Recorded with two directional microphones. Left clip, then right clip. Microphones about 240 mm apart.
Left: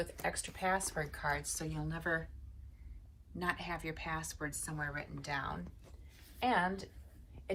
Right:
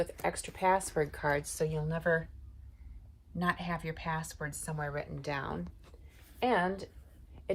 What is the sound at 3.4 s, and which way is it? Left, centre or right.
A woman's voice, right.